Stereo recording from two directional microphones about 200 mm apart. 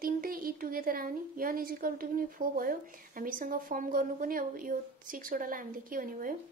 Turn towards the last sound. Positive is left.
turn(degrees=-45)  # may be behind; listen again after turning